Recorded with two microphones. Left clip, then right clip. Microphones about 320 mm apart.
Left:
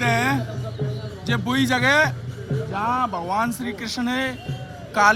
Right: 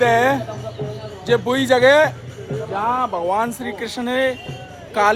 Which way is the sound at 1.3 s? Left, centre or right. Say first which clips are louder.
Right 6 dB; centre.